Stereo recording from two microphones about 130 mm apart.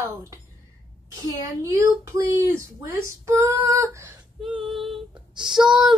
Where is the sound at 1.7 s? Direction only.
20° right (ahead or behind).